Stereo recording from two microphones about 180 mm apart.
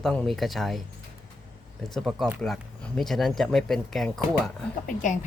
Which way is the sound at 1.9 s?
Centre (ahead or behind).